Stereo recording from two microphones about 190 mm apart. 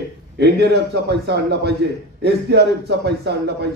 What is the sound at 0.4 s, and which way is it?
A man's voice, 60° right (ahead or behind).